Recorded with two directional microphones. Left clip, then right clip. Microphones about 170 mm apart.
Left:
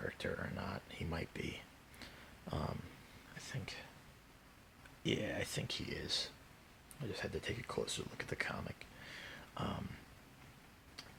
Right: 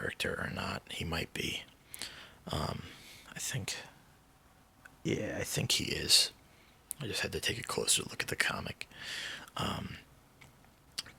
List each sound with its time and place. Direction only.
0.0 s speech: 25° right (ahead or behind)
3.3 s speech: 40° right (ahead or behind)
5.1 s speech: 35° right (ahead or behind)